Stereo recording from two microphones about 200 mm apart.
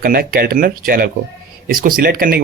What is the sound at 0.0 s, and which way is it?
Speech, 45° right (ahead or behind).